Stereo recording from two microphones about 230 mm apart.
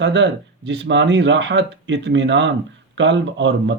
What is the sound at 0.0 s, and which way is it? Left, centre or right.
Speech, right.